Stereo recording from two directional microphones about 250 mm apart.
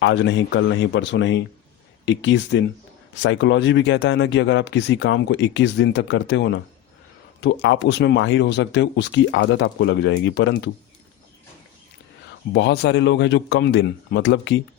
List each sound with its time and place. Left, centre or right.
0.0 s speech: left
12.5 s speech: left